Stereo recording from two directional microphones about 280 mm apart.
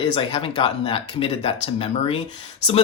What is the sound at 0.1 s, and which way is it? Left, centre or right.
Speech, centre.